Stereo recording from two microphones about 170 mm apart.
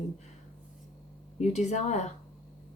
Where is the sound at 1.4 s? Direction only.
45° left (ahead or behind).